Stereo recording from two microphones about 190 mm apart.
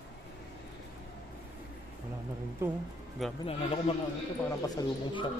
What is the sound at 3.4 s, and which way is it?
Speech, 30° left (ahead or behind).